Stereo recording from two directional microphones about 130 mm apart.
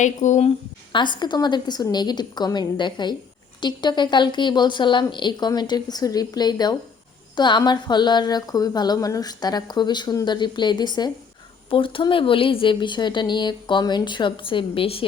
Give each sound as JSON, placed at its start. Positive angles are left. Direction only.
{"t": 0.0, "sound": "speech", "side_deg": 70}
{"t": 0.9, "sound": "speech", "side_deg": 35}